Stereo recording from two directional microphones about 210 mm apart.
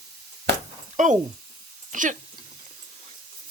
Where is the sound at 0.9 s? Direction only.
35° right (ahead or behind).